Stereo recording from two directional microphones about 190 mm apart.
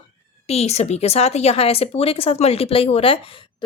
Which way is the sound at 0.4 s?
35° left (ahead or behind).